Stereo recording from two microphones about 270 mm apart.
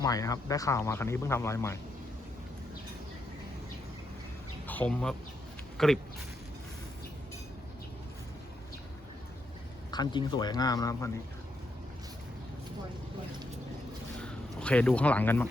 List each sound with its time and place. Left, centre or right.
0.0 s speech: centre
4.6 s speech: centre
9.9 s speech: centre
14.2 s speech: centre